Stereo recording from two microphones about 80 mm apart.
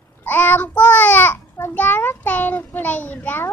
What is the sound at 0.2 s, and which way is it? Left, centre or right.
Babbling, left.